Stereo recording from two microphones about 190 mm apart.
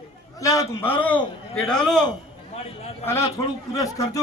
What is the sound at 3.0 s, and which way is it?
Speech, 30° left (ahead or behind).